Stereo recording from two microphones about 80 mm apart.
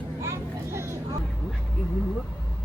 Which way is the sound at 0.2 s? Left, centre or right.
Right.